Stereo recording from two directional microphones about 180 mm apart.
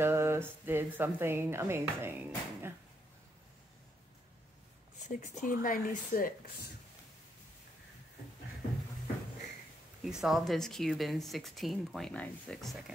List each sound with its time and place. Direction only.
0.0 s speech: 15° right (ahead or behind)
5.2 s speech: 50° left (ahead or behind)
10.0 s speech: centre (ahead or behind)